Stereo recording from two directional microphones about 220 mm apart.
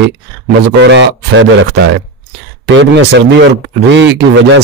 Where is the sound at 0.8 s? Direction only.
55° right (ahead or behind).